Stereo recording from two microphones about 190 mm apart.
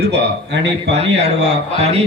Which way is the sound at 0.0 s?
65° right (ahead or behind).